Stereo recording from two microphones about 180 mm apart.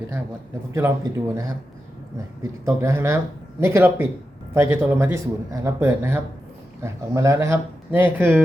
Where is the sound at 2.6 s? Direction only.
15° right (ahead or behind).